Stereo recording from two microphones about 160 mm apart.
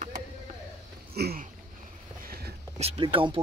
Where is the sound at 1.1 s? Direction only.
75° right (ahead or behind).